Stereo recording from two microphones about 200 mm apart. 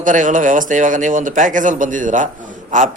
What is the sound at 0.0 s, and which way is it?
A man's voice, 40° right (ahead or behind).